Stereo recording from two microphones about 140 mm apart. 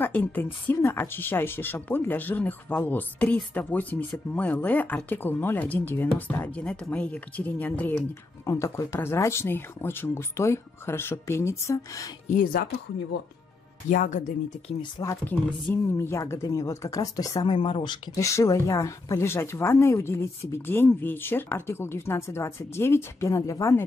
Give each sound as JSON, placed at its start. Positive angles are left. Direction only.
{"t": 0.0, "sound": "speech", "side_deg": 15}
{"t": 12.3, "sound": "speech", "side_deg": 75}
{"t": 13.8, "sound": "speech", "side_deg": 65}
{"t": 15.0, "sound": "speech", "side_deg": 15}
{"t": 17.6, "sound": "speech", "side_deg": 35}
{"t": 18.2, "sound": "speech", "side_deg": 20}